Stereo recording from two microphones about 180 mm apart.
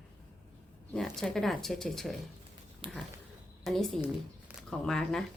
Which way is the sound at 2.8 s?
30° right (ahead or behind).